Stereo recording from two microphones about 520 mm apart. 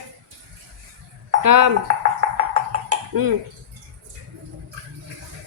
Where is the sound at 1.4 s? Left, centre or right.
Right.